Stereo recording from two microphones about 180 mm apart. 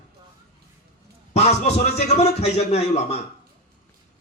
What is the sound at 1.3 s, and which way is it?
A man's voice, 35° left (ahead or behind).